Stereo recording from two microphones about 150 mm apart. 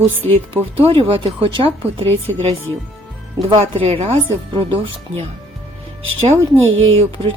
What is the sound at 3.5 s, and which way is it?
Speech, 40° right (ahead or behind).